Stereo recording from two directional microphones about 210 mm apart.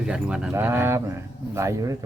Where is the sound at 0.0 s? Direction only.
5° right (ahead or behind).